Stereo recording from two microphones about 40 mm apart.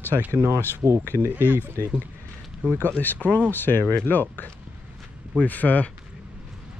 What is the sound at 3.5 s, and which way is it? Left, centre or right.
Speech, left.